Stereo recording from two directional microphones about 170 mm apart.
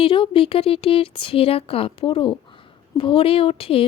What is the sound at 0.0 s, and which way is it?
Speech, 30° left (ahead or behind).